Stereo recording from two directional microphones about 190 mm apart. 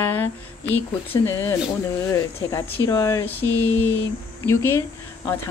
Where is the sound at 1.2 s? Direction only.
15° left (ahead or behind).